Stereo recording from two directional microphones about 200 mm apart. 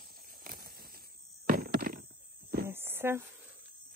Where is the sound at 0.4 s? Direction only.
45° right (ahead or behind).